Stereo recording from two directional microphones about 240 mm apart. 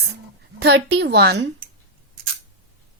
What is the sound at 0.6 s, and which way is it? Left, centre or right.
Speech, right.